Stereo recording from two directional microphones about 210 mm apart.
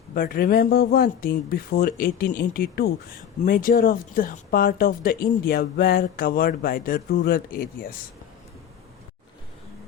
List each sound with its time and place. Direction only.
0.1 s speech: 45° left (ahead or behind)